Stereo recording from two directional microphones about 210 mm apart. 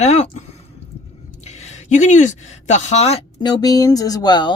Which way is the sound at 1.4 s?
30° left (ahead or behind).